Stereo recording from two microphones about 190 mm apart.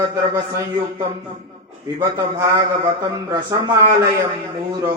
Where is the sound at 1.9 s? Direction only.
20° right (ahead or behind).